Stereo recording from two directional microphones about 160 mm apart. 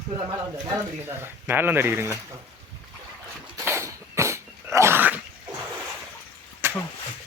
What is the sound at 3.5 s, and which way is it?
Dog, 15° right (ahead or behind).